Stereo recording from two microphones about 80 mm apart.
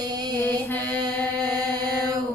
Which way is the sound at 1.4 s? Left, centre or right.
Right.